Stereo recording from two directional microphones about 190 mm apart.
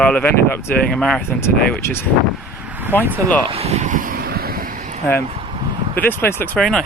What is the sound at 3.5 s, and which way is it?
Vehicle, 35° right (ahead or behind).